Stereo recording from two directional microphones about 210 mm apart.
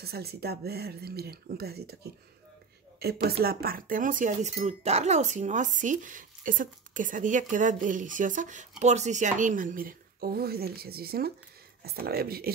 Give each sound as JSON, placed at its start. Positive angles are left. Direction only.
{"t": 0.0, "sound": "speech", "side_deg": -50}
{"t": 3.0, "sound": "speech", "side_deg": -50}